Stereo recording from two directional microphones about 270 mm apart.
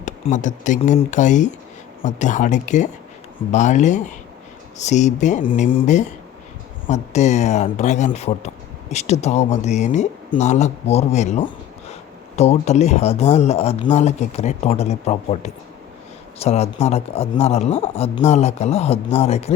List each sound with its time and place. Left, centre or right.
0.0 s speech: left